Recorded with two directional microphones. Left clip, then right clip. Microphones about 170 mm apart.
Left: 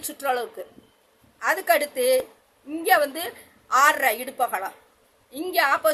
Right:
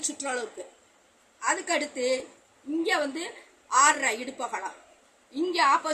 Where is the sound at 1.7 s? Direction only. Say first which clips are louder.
Left 7 dB; 60° left (ahead or behind).